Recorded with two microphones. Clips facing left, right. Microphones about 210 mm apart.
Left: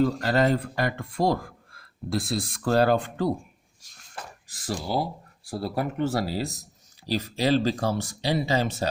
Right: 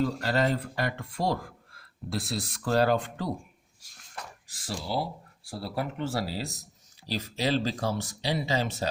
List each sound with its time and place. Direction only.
0.0 s speech: 50° left (ahead or behind)
4.6 s speech: 45° left (ahead or behind)